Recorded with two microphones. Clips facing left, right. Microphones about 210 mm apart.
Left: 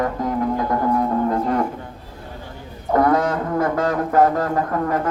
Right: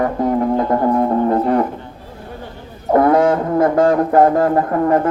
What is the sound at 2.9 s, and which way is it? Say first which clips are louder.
Brass instrument: right 5 dB; 25° right (ahead or behind).